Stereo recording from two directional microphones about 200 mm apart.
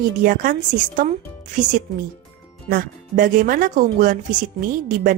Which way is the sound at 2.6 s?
45° right (ahead or behind).